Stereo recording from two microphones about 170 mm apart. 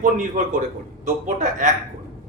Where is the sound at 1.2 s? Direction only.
45° right (ahead or behind).